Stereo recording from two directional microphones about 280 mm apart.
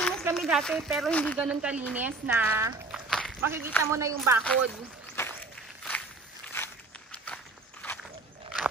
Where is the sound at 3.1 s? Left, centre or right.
Centre.